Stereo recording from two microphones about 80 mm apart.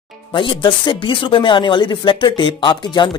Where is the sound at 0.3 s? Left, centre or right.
Left.